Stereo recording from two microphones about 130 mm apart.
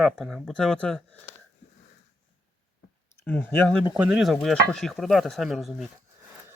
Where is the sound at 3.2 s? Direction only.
15° left (ahead or behind).